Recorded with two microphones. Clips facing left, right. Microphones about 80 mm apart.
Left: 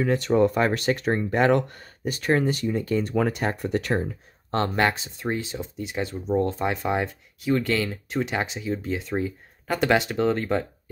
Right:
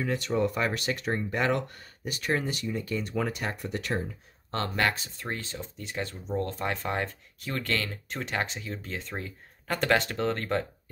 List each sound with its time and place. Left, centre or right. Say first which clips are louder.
0.0 s speech: left 7 dB; left
4.5 s speech: left 5 dB; left; by 10.7 s centre